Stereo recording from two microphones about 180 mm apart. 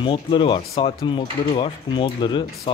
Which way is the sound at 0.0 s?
30° left (ahead or behind).